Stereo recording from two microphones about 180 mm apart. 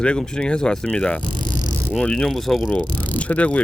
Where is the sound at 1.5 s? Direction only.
45° left (ahead or behind).